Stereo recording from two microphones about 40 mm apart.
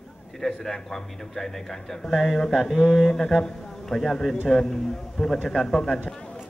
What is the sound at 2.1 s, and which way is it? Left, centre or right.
Speech, centre.